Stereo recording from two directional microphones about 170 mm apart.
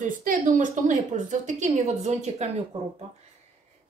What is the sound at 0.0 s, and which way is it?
A woman's voice, 50° right (ahead or behind).